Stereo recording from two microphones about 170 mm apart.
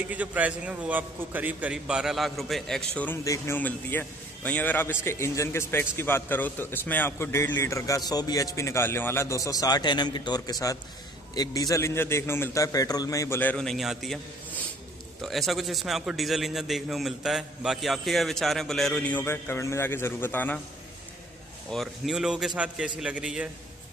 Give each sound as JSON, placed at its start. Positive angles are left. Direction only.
{"t": 0.1, "sound": "a man's voice", "side_deg": -10}
{"t": 15.2, "sound": "a man's voice", "side_deg": 0}
{"t": 21.6, "sound": "a man's voice", "side_deg": 0}